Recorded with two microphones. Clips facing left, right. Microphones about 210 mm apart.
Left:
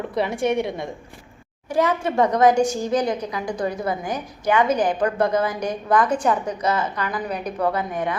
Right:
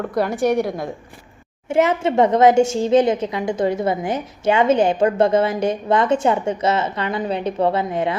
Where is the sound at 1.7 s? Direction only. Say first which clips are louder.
Right 4 dB; 25° right (ahead or behind).